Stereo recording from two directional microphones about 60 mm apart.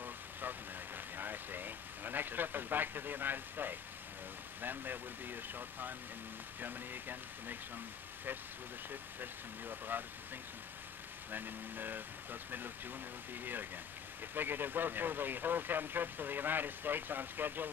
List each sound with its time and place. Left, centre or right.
0.0 s vehicle: right
1.1 s speech: right
9.2 s speech: right
11.3 s speech: right